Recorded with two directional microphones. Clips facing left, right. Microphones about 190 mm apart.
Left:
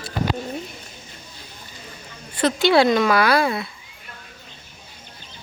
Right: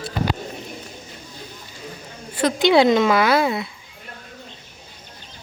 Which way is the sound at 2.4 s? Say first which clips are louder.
Right 1 dB; 15° right (ahead or behind).